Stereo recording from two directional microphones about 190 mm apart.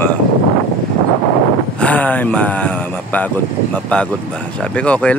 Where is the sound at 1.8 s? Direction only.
10° left (ahead or behind).